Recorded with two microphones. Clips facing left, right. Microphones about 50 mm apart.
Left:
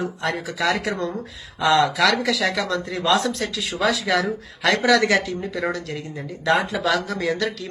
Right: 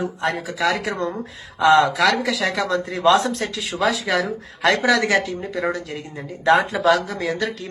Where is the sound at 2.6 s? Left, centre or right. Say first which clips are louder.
Right 5 dB; right.